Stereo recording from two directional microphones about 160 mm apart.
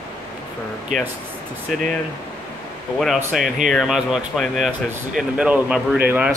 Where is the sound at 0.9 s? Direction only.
55° right (ahead or behind).